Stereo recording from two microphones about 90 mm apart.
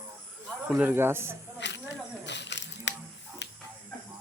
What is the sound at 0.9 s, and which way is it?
Speech, 25° right (ahead or behind).